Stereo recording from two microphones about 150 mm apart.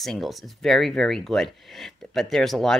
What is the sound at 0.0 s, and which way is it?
Speech, centre (ahead or behind).